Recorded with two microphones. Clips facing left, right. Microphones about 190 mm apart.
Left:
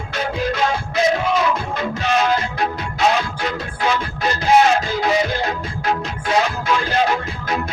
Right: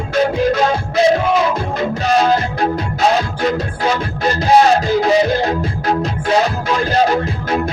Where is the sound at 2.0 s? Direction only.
35° right (ahead or behind).